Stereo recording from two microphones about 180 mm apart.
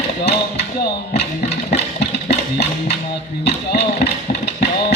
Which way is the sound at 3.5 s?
65° left (ahead or behind).